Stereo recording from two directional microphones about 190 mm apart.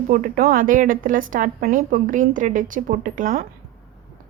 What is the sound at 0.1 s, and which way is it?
A woman's voice, 50° right (ahead or behind).